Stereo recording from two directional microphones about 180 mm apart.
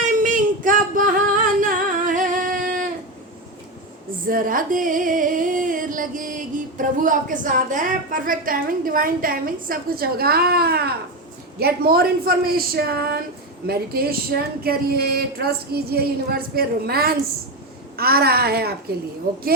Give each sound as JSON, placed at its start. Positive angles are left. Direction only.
{"t": 0.1, "sound": "a sound", "side_deg": -45}
{"t": 1.6, "sound": "singing", "side_deg": -45}
{"t": 4.3, "sound": "music", "side_deg": -50}
{"t": 11.6, "sound": "speech", "side_deg": -60}